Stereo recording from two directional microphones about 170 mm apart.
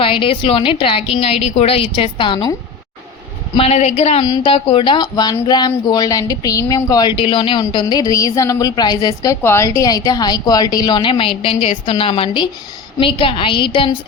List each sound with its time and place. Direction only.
0.0 s a woman's voice: 30° left (ahead or behind)
3.6 s a woman's voice: 40° left (ahead or behind)
4.2 s a woman's voice: 25° left (ahead or behind)